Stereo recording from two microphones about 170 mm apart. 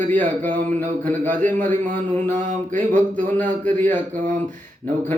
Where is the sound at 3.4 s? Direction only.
10° left (ahead or behind).